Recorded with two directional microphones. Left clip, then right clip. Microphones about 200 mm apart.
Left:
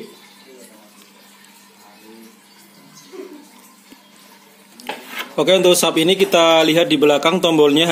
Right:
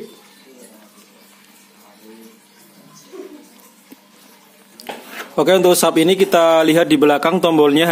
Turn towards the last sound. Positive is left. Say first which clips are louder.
# right 1 dB
turn(degrees=-20)  # may be behind; listen again after turning